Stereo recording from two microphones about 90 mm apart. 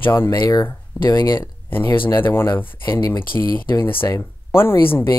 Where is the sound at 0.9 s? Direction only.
15° left (ahead or behind).